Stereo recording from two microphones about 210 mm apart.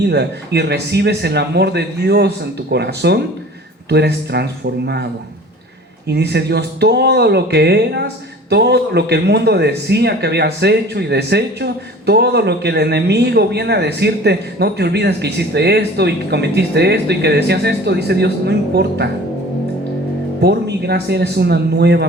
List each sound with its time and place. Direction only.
0.0 s speech: 50° right (ahead or behind)
6.1 s speech: 50° right (ahead or behind)
20.4 s speech: 50° right (ahead or behind)